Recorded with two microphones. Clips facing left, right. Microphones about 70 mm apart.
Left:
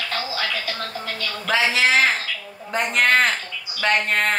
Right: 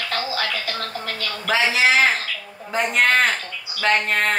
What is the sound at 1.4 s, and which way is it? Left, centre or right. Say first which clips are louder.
A man's voice: right 1 dB; centre.